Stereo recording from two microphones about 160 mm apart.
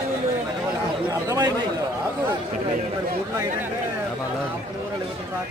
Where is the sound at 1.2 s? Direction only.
20° right (ahead or behind).